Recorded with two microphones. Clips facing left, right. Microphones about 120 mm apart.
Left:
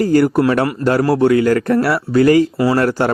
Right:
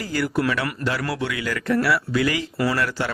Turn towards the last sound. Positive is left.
turn(degrees=45)  # may be behind; listen again after turning